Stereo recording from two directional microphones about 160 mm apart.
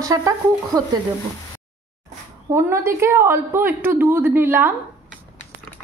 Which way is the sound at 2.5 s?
15° right (ahead or behind).